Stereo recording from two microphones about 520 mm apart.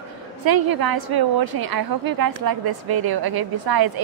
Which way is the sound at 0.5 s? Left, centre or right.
Right.